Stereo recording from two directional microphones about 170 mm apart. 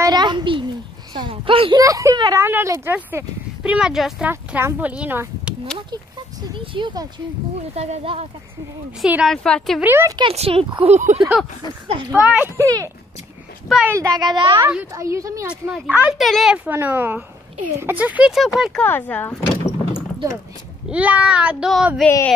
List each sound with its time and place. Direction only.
0.0 s a sound: 25° right (ahead or behind)
1.1 s a woman's voice: 30° right (ahead or behind); by 5.5 s 10° right (ahead or behind)
6.5 s a child's voice: 30° right (ahead or behind)
7.7 s a woman's voice: 35° right (ahead or behind)
9.0 s speech: 5° right (ahead or behind)
9.8 s a woman's voice: 15° right (ahead or behind)
10.1 s a woman's voice: 35° right (ahead or behind)
12.1 s a woman's voice: 10° right (ahead or behind)
15.4 s a woman's voice: 10° right (ahead or behind); by 20.0 s 15° left (ahead or behind)
20.9 s a woman's voice: 10° right (ahead or behind)